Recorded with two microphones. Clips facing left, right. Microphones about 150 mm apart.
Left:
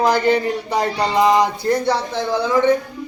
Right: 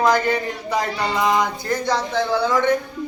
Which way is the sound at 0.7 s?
30° left (ahead or behind).